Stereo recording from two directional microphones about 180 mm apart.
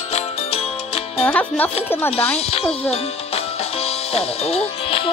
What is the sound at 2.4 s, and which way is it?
Speech, 35° left (ahead or behind).